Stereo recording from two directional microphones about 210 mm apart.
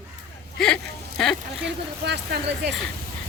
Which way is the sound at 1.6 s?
55° right (ahead or behind).